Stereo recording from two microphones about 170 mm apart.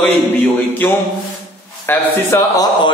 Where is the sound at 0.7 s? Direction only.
10° left (ahead or behind).